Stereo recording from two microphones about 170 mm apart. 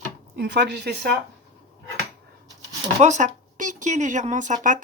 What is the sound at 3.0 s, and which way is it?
Speech, 45° right (ahead or behind).